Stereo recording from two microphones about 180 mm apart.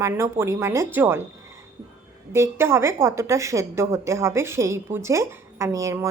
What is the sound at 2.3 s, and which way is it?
A woman's voice, 15° right (ahead or behind).